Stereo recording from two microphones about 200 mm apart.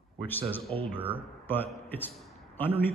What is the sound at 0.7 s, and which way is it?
Speech, 25° right (ahead or behind).